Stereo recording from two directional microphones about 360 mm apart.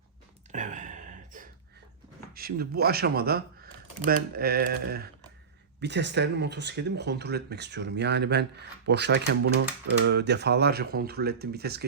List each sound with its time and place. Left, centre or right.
0.5 s gasp: right
2.3 s speech: right